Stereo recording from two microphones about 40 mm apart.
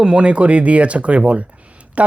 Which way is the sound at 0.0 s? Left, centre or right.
Right.